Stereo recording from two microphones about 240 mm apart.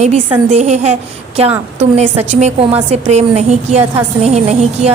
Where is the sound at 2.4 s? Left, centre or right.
Right.